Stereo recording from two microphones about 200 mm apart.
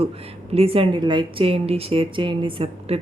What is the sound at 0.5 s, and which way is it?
A woman's voice, 30° right (ahead or behind).